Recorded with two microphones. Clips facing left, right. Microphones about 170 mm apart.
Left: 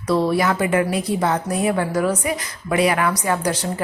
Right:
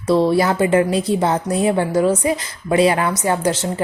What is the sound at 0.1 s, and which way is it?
A woman's voice, 25° right (ahead or behind).